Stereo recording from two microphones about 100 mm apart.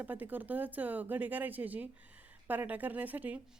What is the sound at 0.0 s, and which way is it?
Speech, 15° right (ahead or behind).